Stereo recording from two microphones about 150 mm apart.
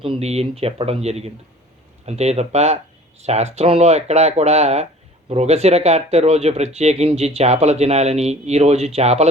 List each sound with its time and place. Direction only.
0.0 s speech: 40° right (ahead or behind)